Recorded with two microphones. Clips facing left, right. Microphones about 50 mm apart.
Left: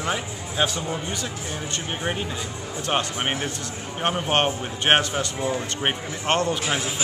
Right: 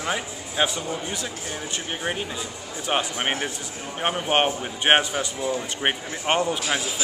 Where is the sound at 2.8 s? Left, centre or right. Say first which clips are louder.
Even; centre.